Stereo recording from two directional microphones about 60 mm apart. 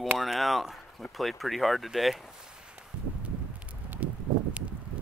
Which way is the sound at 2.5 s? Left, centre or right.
Centre.